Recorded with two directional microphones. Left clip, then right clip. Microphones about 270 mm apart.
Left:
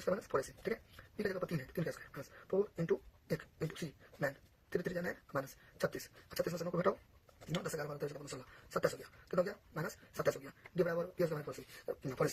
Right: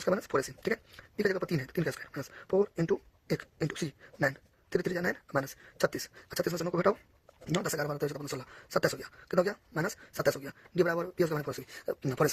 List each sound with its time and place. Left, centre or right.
0.0 s speech: right
9.3 s speech: right